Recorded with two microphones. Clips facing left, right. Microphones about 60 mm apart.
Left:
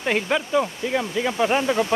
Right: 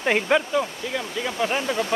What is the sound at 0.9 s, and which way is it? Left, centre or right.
Speech, centre.